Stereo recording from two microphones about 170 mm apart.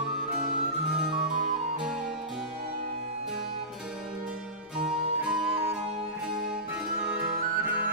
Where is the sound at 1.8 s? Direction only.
5° right (ahead or behind).